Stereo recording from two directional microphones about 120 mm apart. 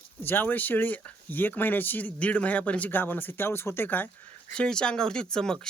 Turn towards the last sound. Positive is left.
turn(degrees=5)  # may be behind; listen again after turning